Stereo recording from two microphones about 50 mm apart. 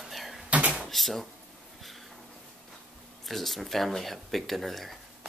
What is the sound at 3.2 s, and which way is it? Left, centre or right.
Speech, centre.